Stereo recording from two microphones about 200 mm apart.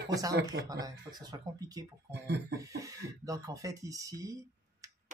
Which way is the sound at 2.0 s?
60° right (ahead or behind).